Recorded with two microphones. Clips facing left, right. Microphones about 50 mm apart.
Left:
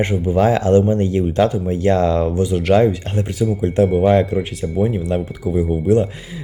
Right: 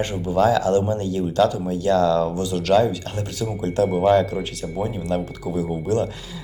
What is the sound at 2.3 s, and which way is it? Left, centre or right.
Speech, left.